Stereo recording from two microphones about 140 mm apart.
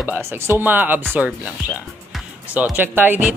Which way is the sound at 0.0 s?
15° right (ahead or behind).